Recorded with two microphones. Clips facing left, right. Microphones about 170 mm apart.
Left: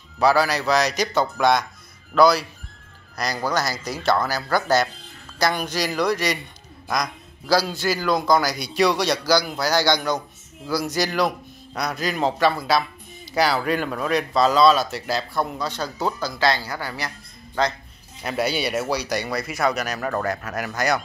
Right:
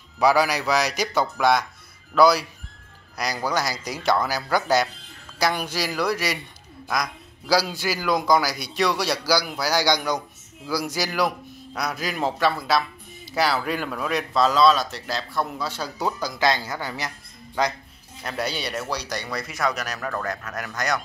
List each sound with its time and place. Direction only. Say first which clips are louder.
0.2 s a man's voice: left 1 dB; 15° right (ahead or behind)
18.2 s speech: left 5 dB; 5° left (ahead or behind)